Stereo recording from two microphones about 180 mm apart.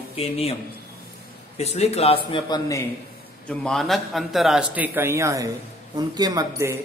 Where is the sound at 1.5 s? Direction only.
35° left (ahead or behind); by 2.8 s 20° left (ahead or behind).